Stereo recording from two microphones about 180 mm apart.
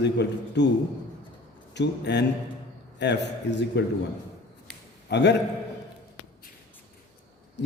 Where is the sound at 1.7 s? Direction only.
70° left (ahead or behind).